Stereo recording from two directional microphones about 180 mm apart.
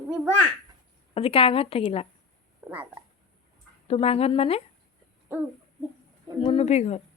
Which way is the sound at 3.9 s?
35° left (ahead or behind).